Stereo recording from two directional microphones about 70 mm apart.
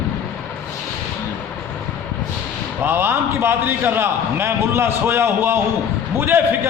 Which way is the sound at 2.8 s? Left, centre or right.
Right.